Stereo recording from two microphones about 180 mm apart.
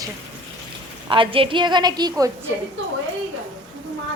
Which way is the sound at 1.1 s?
30° right (ahead or behind).